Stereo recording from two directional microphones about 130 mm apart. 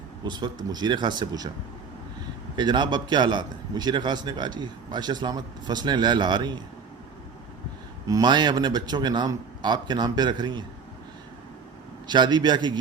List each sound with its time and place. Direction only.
0.3 s a man's voice: 35° right (ahead or behind)
2.6 s a man's voice: 35° right (ahead or behind)
8.0 s a man's voice: 30° right (ahead or behind)
12.0 s a man's voice: 35° right (ahead or behind)